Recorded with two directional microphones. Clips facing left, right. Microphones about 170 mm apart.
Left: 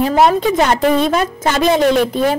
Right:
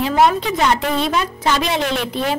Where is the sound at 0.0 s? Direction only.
40° left (ahead or behind).